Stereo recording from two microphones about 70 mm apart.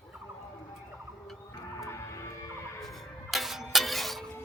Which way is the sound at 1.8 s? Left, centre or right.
Left.